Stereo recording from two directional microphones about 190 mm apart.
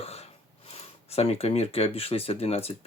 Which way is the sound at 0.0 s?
35° left (ahead or behind).